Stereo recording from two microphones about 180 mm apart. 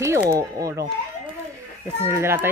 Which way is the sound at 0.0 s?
15° right (ahead or behind).